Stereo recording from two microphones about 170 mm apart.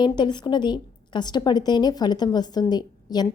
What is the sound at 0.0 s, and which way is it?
A woman's voice, 25° left (ahead or behind).